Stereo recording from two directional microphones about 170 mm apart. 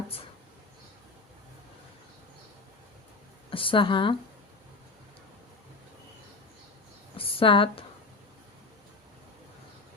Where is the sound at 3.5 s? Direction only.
30° left (ahead or behind).